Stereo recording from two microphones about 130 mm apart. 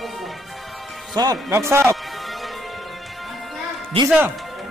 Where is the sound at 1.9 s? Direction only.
Centre (ahead or behind).